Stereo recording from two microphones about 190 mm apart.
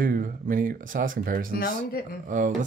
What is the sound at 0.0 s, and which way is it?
Speech, 45° right (ahead or behind).